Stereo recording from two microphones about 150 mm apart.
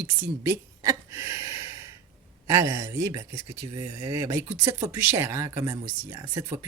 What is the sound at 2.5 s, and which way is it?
Speech, 20° right (ahead or behind).